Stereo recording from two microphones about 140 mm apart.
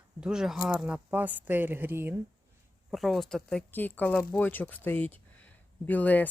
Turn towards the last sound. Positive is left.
turn(degrees=10)  # may be behind; listen again after turning